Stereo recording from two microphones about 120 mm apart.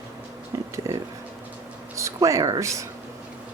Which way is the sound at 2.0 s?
25° right (ahead or behind).